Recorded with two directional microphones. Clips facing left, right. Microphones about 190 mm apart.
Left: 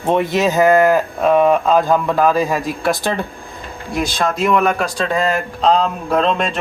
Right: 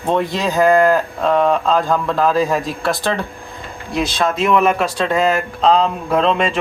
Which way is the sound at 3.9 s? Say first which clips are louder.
Right 1 dB; centre (ahead or behind).